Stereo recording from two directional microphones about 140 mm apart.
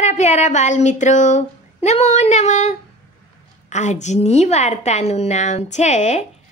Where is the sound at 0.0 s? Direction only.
55° left (ahead or behind).